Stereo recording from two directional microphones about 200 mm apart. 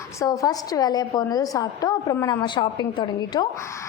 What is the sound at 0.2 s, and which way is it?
A woman's voice, 20° left (ahead or behind).